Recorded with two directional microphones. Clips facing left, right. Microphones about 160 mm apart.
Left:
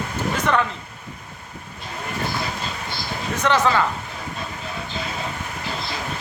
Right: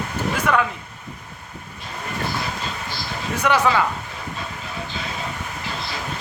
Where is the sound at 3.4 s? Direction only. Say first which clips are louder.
Even; 10° right (ahead or behind).